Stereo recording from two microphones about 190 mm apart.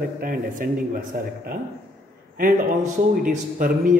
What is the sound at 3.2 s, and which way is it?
Speech, 45° right (ahead or behind).